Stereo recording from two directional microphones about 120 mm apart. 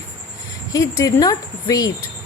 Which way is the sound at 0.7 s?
30° left (ahead or behind).